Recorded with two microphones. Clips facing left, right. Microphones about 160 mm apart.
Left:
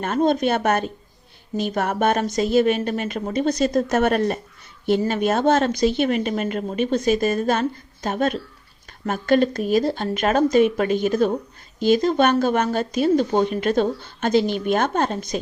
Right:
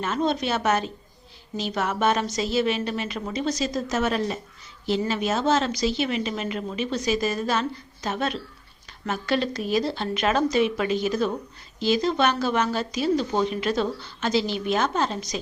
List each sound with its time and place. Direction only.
0.0 s speech: 50° left (ahead or behind)